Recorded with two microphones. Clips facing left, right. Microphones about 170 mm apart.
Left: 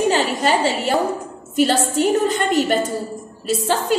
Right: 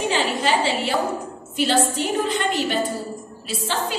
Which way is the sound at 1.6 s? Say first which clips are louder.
Left 4 dB; 45° left (ahead or behind).